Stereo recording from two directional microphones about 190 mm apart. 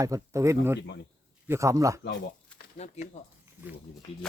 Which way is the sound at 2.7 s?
35° left (ahead or behind).